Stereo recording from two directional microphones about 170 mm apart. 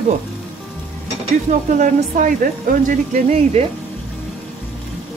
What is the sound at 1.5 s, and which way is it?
Speech, 45° right (ahead or behind).